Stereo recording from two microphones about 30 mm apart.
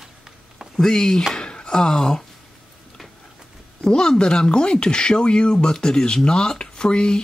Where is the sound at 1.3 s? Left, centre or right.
Left.